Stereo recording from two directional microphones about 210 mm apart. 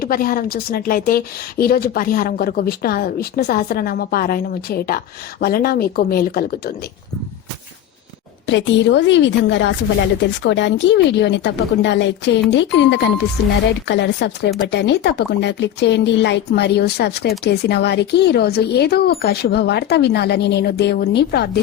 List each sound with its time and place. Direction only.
0.0 s speech: 45° left (ahead or behind)
8.4 s a woman's voice: 60° left (ahead or behind)